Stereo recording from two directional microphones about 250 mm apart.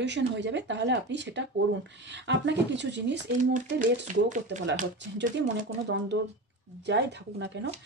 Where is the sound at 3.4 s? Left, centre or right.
Right.